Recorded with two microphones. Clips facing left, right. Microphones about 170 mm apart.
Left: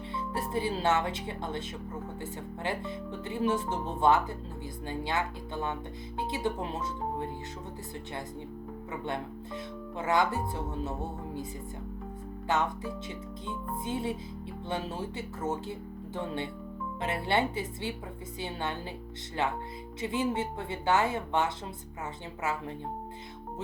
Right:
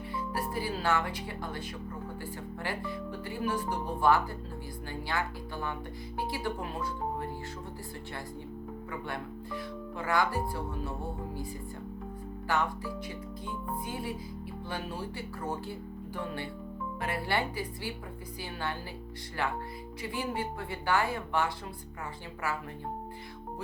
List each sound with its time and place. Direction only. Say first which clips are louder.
0.1 s speech: left 2 dB; 25° left (ahead or behind)
8.9 s speech: left 4 dB; 20° left (ahead or behind)
12.5 s speech: left 1 dB; 20° left (ahead or behind)